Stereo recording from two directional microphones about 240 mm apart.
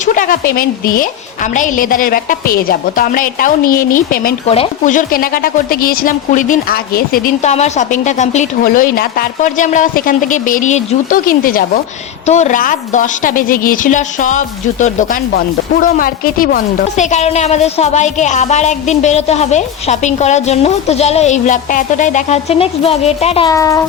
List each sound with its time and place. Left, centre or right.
0.0 s speech: left
4.4 s a woman's voice: left